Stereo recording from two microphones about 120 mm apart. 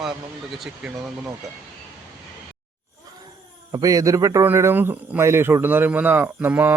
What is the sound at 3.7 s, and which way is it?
A man's voice, 30° right (ahead or behind).